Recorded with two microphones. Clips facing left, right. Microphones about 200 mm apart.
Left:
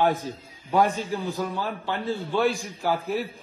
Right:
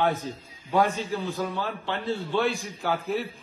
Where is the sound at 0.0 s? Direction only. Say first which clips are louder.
Left 2 dB; 15° left (ahead or behind).